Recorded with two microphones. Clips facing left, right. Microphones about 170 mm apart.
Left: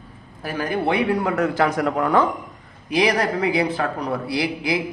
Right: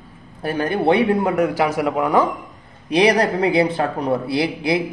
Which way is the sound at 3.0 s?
30° right (ahead or behind).